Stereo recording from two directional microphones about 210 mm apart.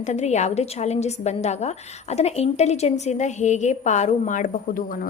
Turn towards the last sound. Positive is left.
turn(degrees=40)  # may be behind; listen again after turning